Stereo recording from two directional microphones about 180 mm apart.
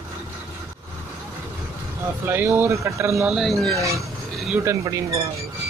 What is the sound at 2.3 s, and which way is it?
Speech, 10° right (ahead or behind).